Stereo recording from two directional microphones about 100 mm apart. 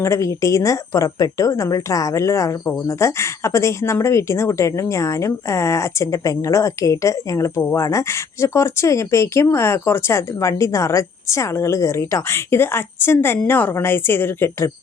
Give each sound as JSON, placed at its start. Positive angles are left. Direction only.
{"t": 0.0, "sound": "a woman's voice", "side_deg": 30}